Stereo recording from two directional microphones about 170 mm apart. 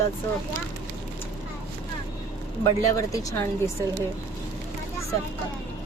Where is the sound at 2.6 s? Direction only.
20° left (ahead or behind).